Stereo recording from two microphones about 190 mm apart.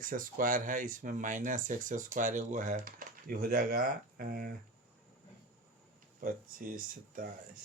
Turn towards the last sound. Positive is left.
turn(degrees=-45)  # may be behind; listen again after turning